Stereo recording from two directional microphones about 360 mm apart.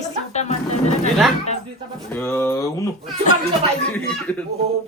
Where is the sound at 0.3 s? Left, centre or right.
Centre.